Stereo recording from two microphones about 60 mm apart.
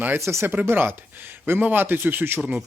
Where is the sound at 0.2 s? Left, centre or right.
Right.